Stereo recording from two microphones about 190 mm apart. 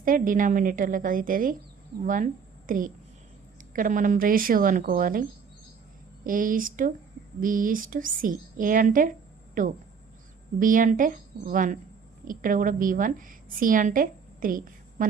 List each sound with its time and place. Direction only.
0.0 s a woman's voice: 45° right (ahead or behind)
6.2 s a woman's voice: 45° right (ahead or behind)